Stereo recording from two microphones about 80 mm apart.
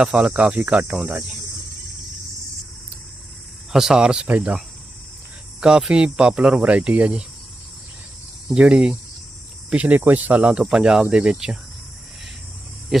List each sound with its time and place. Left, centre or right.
0.0 s speech: centre
3.7 s speech: centre
5.5 s speech: centre
8.4 s speech: centre
12.9 s speech: centre